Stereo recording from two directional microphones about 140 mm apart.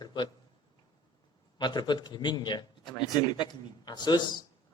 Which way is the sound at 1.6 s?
30° left (ahead or behind).